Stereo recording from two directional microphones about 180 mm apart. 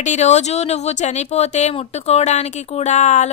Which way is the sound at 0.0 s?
40° left (ahead or behind).